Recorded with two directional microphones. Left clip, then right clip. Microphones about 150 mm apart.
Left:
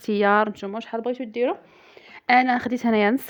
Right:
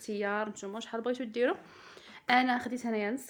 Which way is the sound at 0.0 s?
90° left.